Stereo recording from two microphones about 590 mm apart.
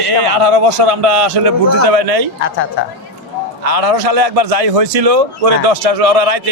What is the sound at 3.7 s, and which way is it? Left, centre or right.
A man's voice, right.